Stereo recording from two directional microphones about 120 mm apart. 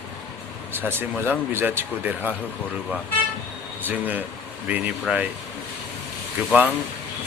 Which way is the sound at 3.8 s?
15° right (ahead or behind).